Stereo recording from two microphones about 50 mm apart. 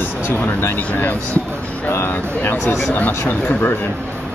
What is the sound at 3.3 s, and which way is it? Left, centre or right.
Speech, left.